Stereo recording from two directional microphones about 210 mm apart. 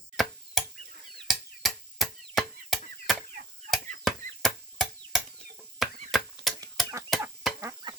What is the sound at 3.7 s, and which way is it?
Chop, 50° right (ahead or behind).